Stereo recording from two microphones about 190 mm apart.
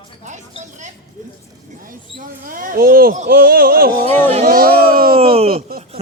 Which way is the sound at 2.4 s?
45° right (ahead or behind).